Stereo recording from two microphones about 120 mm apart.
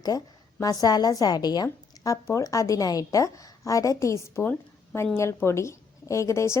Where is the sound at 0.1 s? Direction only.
25° left (ahead or behind).